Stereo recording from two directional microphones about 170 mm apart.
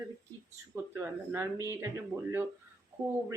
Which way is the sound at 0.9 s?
10° right (ahead or behind).